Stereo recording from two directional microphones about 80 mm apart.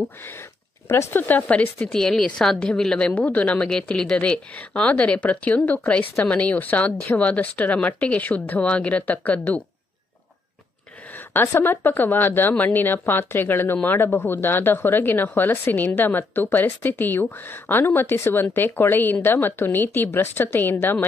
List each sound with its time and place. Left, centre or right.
0.2 s speech: left
1.8 s speech: centre
11.1 s speech: left